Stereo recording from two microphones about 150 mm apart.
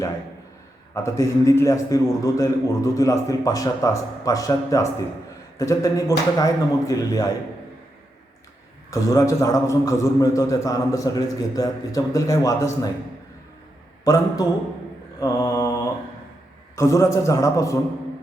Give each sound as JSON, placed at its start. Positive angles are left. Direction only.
{"t": 0.9, "sound": "a man's voice", "side_deg": 20}
{"t": 8.9, "sound": "a man's voice", "side_deg": 20}
{"t": 14.0, "sound": "a man's voice", "side_deg": 20}
{"t": 15.2, "sound": "mantra", "side_deg": 20}
{"t": 16.7, "sound": "a man's voice", "side_deg": 20}